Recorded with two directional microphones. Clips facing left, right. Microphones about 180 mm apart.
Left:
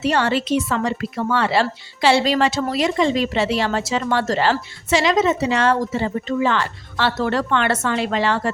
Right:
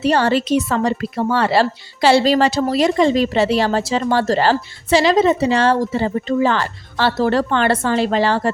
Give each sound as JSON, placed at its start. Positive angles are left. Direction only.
{"t": 0.0, "sound": "a woman's voice", "side_deg": -35}